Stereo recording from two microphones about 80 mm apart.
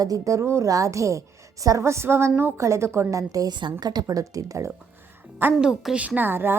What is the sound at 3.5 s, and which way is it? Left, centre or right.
A woman's voice, right.